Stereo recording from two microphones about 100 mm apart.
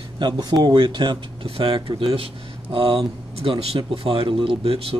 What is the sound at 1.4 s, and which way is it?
A man's voice, 65° right (ahead or behind).